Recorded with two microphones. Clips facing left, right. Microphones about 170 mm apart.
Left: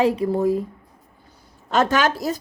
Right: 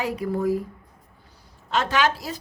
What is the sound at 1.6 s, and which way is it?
Speech, 45° left (ahead or behind).